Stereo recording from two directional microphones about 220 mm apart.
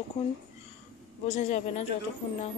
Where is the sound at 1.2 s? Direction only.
30° left (ahead or behind).